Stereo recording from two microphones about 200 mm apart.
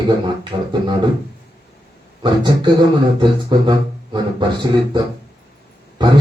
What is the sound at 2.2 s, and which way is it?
Speech, 25° right (ahead or behind).